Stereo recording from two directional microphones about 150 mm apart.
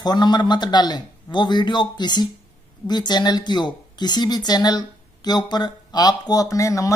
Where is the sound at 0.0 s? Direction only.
30° left (ahead or behind).